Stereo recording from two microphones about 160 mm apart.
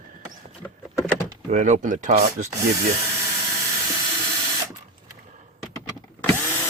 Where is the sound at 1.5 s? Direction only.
55° right (ahead or behind).